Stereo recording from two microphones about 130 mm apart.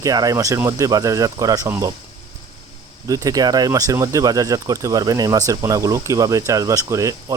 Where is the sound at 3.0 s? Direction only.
25° right (ahead or behind).